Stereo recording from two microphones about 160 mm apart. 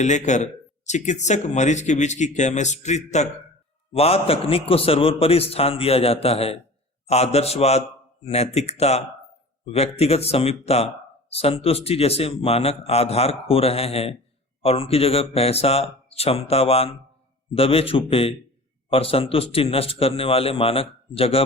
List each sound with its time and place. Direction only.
0.0 s a man's voice: 45° left (ahead or behind)